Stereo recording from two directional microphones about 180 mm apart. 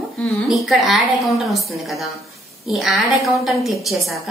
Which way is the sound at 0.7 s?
Centre (ahead or behind).